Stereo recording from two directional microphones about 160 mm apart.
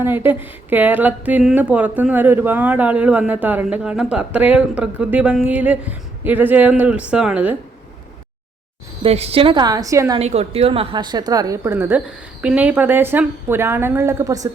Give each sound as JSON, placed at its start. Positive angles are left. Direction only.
{"t": 0.0, "sound": "speech", "side_deg": -15}
{"t": 9.0, "sound": "a woman's voice", "side_deg": -40}
{"t": 10.2, "sound": "speech", "side_deg": -40}